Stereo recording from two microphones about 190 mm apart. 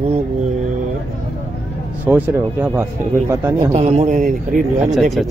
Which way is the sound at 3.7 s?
35° right (ahead or behind).